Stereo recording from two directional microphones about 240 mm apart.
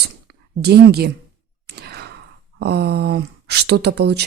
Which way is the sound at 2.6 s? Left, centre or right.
Right.